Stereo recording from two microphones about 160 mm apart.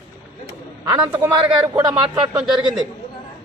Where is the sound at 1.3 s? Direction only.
25° right (ahead or behind).